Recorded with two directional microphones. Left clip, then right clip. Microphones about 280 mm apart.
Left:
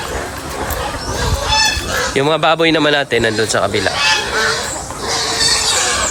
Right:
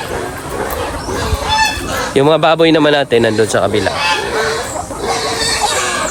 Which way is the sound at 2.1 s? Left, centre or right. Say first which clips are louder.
Right 4 dB; centre.